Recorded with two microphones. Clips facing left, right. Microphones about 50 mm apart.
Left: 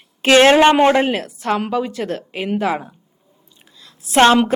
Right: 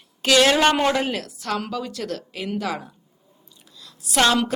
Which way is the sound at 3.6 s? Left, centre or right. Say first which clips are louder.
Even; left.